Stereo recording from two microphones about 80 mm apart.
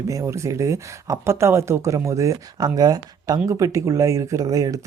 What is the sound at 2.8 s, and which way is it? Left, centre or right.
Speech, right.